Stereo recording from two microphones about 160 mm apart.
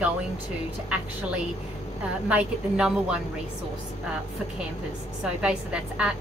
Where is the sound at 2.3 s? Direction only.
5° right (ahead or behind).